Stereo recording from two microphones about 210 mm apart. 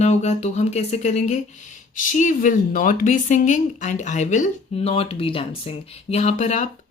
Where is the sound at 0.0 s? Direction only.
30° left (ahead or behind).